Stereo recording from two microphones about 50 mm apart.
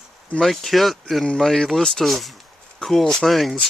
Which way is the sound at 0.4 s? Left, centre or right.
Centre.